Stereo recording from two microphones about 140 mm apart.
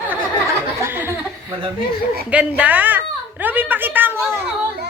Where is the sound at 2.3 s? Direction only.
10° right (ahead or behind).